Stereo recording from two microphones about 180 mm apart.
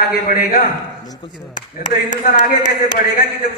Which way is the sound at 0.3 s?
55° left (ahead or behind).